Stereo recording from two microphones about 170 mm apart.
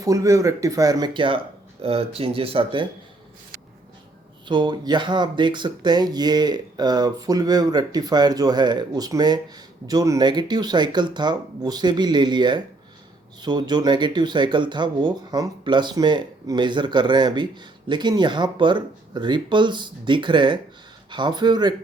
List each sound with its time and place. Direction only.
0.0 s speech: 20° right (ahead or behind)
4.4 s speech: 25° right (ahead or behind)